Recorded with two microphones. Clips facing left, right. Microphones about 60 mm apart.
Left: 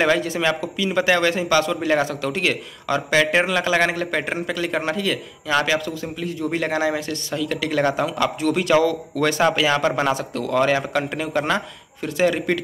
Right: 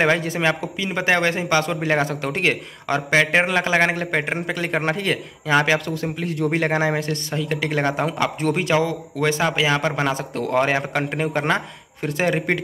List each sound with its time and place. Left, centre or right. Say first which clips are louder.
0.0 s a man's voice: even; right
4.6 s speech: right 1 dB; right
8.7 s speech: left 3 dB; centre
10.1 s a man's voice: even; right